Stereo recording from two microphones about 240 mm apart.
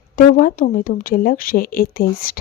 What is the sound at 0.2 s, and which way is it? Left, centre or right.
Speech, left.